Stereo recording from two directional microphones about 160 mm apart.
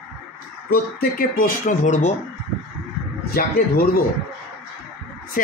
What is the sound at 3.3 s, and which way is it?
Speech, 70° left (ahead or behind).